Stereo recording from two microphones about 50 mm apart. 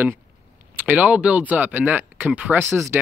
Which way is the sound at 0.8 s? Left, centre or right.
Right.